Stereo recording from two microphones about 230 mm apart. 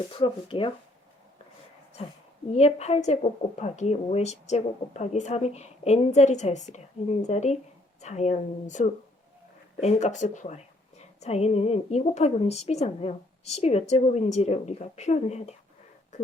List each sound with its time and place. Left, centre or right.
0.2 s speech: left
2.5 s speech: left